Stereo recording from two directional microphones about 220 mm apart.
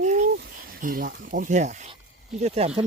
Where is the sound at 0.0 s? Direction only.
35° right (ahead or behind).